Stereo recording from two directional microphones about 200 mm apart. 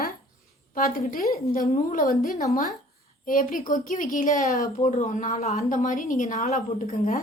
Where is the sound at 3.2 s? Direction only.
45° left (ahead or behind).